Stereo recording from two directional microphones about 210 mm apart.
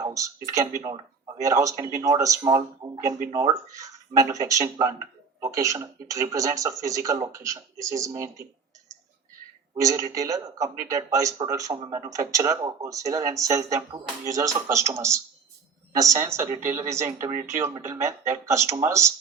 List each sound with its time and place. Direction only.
0.0 s speech: 15° right (ahead or behind)
9.8 s speech: 15° right (ahead or behind)